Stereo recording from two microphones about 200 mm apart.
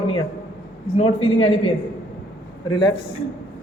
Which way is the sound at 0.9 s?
30° left (ahead or behind).